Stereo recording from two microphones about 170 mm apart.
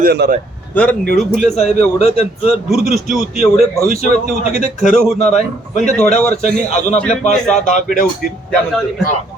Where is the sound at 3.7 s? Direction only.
40° left (ahead or behind).